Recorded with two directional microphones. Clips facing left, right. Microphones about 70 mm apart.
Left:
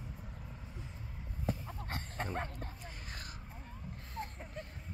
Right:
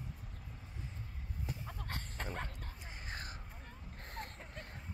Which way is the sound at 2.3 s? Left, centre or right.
Left.